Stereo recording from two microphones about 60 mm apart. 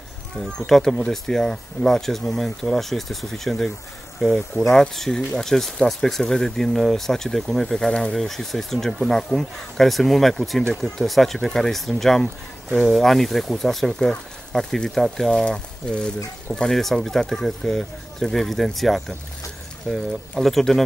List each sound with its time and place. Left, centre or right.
0.7 s speech: centre